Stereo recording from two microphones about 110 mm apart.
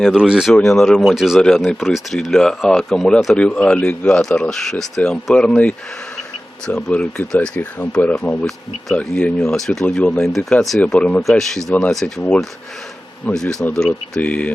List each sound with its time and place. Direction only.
0.0 s speech: 5° right (ahead or behind)
3.3 s speech: 10° left (ahead or behind)
9.8 s speech: 15° left (ahead or behind)
10.2 s speech: centre (ahead or behind)
13.2 s speech: 5° left (ahead or behind)